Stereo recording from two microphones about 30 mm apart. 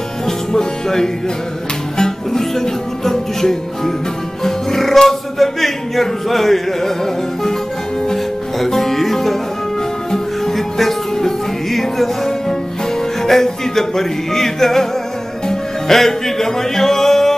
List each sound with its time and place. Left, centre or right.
0.5 s music: centre
4.4 s speech: centre
8.6 s music: centre
13.2 s music: centre
15.9 s music: centre